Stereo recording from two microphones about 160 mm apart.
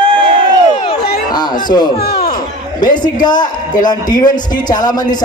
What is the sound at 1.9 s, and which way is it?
Speech, 85° left.